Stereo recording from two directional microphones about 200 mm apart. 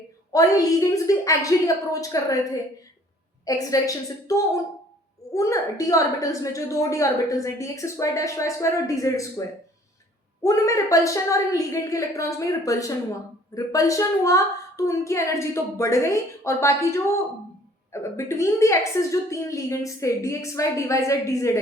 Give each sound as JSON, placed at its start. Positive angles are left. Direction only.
{"t": 0.3, "sound": "a woman's voice", "side_deg": 15}
{"t": 10.4, "sound": "a woman's voice", "side_deg": 15}